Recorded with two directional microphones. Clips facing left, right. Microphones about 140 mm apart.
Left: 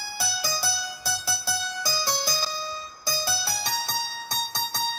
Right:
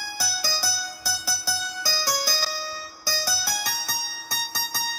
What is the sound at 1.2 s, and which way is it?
Music, 20° left (ahead or behind).